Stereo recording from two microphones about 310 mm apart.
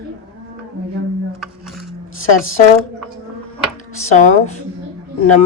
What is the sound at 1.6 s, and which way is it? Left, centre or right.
Dishes, centre.